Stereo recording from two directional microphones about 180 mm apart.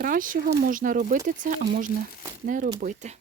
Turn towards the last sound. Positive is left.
turn(degrees=-45)  # may be behind; listen again after turning